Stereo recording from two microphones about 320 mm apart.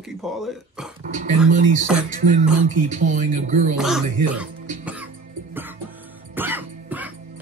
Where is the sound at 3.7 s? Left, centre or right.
Centre.